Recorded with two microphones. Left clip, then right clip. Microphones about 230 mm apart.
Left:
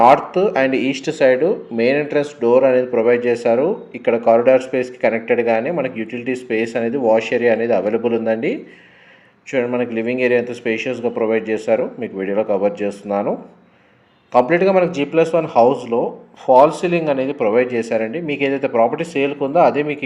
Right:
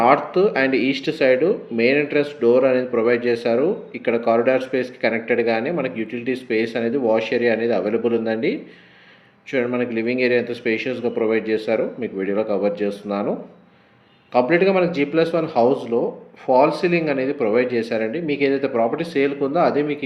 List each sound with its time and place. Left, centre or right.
0.0 s speech: left
14.3 s speech: left
16.6 s speech: centre
17.4 s speech: left
19.7 s speech: centre